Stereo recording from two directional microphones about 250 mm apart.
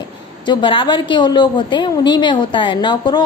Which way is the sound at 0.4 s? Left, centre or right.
Centre.